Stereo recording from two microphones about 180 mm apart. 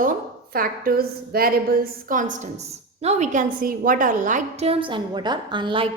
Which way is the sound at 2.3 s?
40° right (ahead or behind).